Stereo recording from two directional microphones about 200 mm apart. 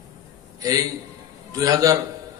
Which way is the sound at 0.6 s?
20° right (ahead or behind).